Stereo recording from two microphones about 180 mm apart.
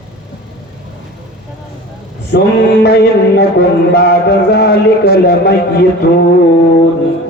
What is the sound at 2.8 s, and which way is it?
A man's voice, 65° left (ahead or behind).